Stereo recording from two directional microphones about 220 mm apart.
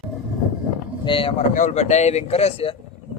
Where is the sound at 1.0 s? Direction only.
25° left (ahead or behind).